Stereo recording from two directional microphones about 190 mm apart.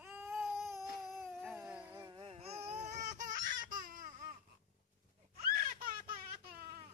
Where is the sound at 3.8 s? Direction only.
45° right (ahead or behind).